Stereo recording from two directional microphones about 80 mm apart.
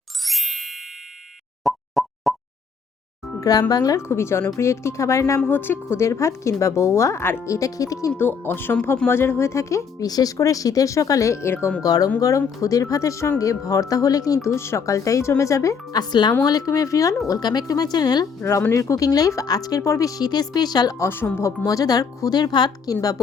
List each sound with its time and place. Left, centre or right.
0.3 s ding: centre
1.6 s plop: centre
3.4 s a woman's voice: left
4.0 s speech: left
5.5 s speech: left
8.2 s speech: left
10.1 s a woman's voice: left
11.8 s a woman's voice: left
14.4 s speech: left
16.4 s a woman's voice: left
18.7 s a woman's voice: left
21.0 s speech: left
21.6 s speech: left
22.9 s a woman's voice: left